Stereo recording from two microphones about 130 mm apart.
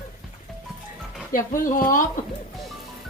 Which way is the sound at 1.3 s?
90° left.